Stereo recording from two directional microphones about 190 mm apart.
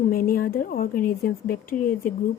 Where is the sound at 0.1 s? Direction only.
50° left (ahead or behind).